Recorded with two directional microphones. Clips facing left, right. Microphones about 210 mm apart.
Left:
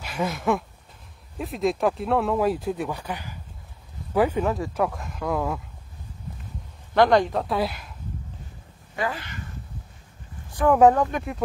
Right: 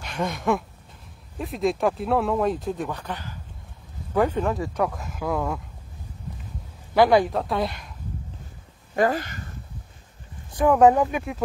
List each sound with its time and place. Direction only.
0.0 s speech: 5° left (ahead or behind)
6.9 s speech: 5° right (ahead or behind)
8.9 s speech: 45° right (ahead or behind)
10.7 s speech: 5° right (ahead or behind)